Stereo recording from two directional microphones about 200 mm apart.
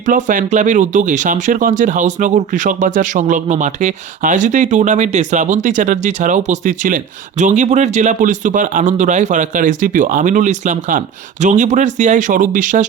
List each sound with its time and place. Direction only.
0.0 s speech: 40° right (ahead or behind)